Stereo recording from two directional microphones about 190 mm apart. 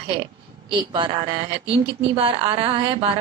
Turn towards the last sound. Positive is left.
turn(degrees=-30)  # may be behind; listen again after turning